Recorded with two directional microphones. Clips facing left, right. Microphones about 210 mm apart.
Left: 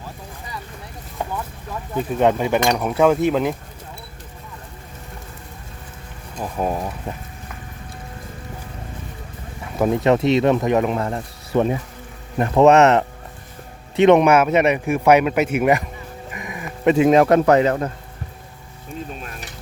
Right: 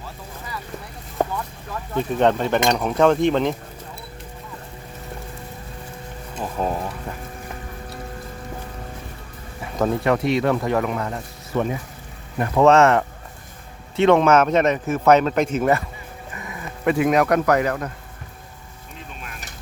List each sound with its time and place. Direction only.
1.2 s boat: 45° right (ahead or behind)
2.0 s speech: 10° left (ahead or behind)
6.6 s speech: 10° left (ahead or behind)
9.7 s speech: 15° left (ahead or behind); by 11.7 s 35° left (ahead or behind)
12.4 s speech: 20° left (ahead or behind)